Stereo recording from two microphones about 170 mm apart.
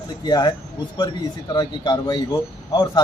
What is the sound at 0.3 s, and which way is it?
Speech, 25° left (ahead or behind).